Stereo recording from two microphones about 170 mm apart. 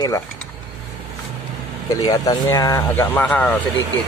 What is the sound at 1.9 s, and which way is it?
Speech, 20° left (ahead or behind).